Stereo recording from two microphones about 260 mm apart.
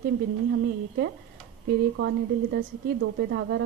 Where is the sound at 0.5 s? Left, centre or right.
Right.